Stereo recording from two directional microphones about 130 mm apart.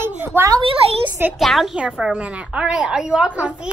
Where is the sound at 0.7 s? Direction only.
40° right (ahead or behind).